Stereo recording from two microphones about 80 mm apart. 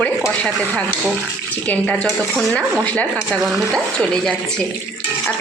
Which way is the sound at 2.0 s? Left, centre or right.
Centre.